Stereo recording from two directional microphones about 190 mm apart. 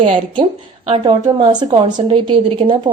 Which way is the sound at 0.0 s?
25° right (ahead or behind).